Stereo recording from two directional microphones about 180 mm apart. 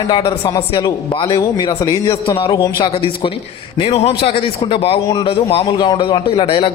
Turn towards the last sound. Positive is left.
turn(degrees=30)  # may be behind; listen again after turning